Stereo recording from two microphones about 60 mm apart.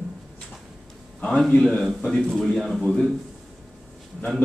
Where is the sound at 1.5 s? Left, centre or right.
Centre.